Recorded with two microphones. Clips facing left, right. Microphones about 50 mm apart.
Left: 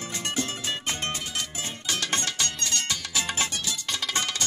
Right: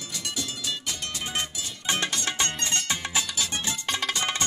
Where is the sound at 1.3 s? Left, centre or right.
Right.